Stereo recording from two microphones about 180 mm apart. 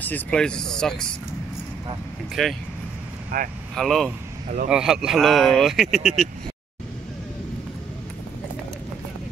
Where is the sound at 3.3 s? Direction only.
50° right (ahead or behind).